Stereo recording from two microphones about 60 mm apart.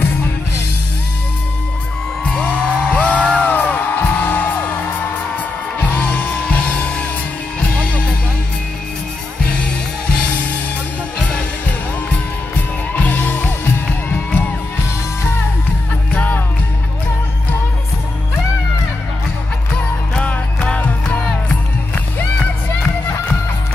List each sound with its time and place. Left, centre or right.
2.2 s music: centre
10.1 s music: left
12.1 s music: left
16.2 s music: left
20.6 s music: centre